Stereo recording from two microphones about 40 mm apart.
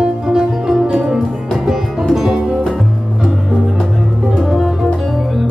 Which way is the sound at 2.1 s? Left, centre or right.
Centre.